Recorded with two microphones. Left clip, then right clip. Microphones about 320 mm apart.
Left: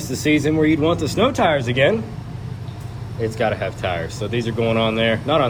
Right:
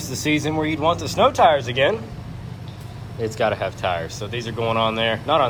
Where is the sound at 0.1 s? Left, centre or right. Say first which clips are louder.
Left 4 dB; centre.